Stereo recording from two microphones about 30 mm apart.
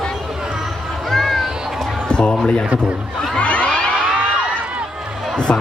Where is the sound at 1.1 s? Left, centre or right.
Centre.